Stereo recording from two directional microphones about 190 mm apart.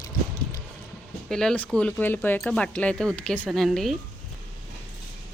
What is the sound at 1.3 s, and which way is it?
Speech, 5° left (ahead or behind).